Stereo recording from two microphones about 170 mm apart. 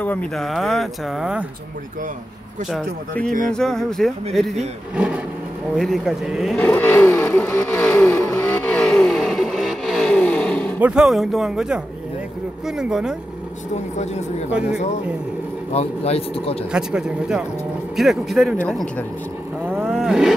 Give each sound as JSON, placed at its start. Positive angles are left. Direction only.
{"t": 0.0, "sound": "speech", "side_deg": 10}
{"t": 2.7, "sound": "speech", "side_deg": 5}
{"t": 6.6, "sound": "vehicle", "side_deg": 10}
{"t": 10.8, "sound": "speech", "side_deg": -5}
{"t": 14.5, "sound": "speech", "side_deg": -5}
{"t": 15.7, "sound": "a man's voice", "side_deg": 40}
{"t": 16.7, "sound": "speech", "side_deg": -5}
{"t": 19.8, "sound": "roaring cats", "side_deg": 0}